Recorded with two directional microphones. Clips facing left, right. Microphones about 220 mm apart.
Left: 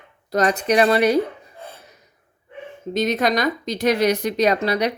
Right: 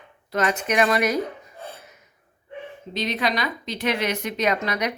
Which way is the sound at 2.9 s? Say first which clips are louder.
Left 6 dB; 45° left (ahead or behind).